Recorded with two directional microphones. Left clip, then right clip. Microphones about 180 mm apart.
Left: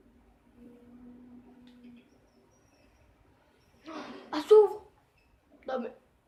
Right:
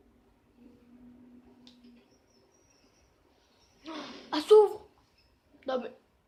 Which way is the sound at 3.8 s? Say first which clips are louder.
Right 1 dB; 45° right (ahead or behind).